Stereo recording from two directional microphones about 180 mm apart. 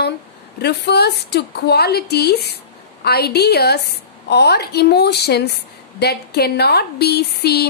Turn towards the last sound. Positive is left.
turn(degrees=65)  # may be behind; listen again after turning